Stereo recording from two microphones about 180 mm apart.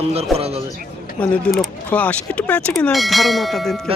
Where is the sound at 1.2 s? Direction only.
5° left (ahead or behind).